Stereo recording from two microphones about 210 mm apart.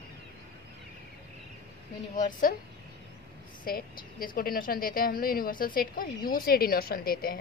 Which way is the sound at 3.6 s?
45° left (ahead or behind).